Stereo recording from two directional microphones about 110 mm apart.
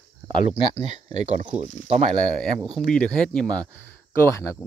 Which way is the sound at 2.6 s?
Centre (ahead or behind).